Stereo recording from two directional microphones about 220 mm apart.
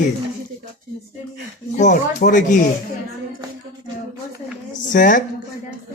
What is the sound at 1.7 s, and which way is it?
Speech, 35° left (ahead or behind).